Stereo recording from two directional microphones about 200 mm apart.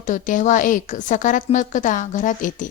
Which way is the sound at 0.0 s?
40° left (ahead or behind).